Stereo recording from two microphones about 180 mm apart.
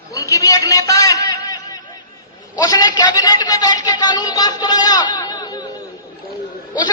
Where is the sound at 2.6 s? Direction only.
20° left (ahead or behind).